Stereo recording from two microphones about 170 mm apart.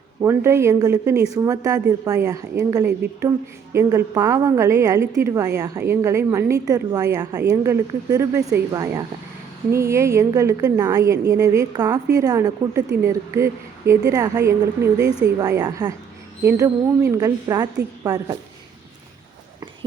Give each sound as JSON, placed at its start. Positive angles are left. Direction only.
{"t": 0.2, "sound": "a woman's voice", "side_deg": -15}